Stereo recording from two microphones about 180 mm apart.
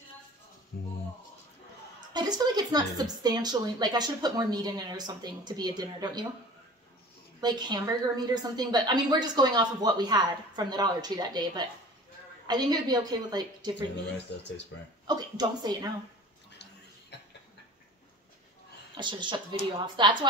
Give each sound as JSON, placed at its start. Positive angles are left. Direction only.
{"t": 0.7, "sound": "speech", "side_deg": 60}
{"t": 2.1, "sound": "a woman's voice", "side_deg": -25}
{"t": 7.3, "sound": "a woman's voice", "side_deg": -25}
{"t": 14.1, "sound": "speech", "side_deg": 75}
{"t": 15.0, "sound": "a woman's voice", "side_deg": -20}
{"t": 17.1, "sound": "a sound", "side_deg": 65}
{"t": 18.9, "sound": "a woman's voice", "side_deg": -25}